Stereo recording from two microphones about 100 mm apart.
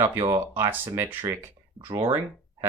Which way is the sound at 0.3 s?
30° right (ahead or behind).